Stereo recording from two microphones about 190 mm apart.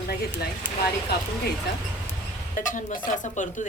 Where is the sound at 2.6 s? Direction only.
45° left (ahead or behind).